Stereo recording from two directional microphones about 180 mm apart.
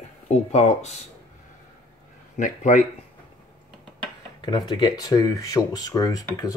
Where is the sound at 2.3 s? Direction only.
45° left (ahead or behind).